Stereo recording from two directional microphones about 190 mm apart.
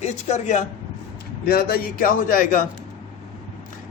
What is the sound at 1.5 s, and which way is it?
A man's voice, 55° left (ahead or behind).